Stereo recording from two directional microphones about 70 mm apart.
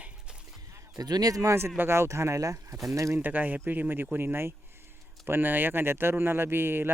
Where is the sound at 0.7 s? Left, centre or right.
Right.